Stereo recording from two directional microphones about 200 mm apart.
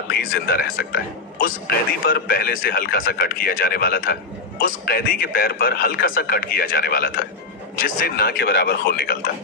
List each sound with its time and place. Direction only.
0.2 s speech: 50° left (ahead or behind)